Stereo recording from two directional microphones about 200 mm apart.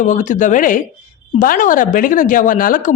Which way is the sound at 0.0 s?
40° left (ahead or behind).